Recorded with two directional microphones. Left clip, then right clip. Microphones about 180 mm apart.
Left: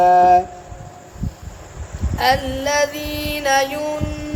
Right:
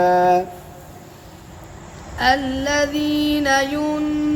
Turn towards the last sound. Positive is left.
turn(degrees=30)  # may be behind; listen again after turning